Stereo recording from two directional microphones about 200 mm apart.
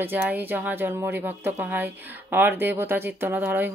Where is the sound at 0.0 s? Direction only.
10° right (ahead or behind).